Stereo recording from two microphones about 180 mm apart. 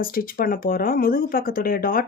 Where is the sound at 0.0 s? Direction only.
55° left (ahead or behind).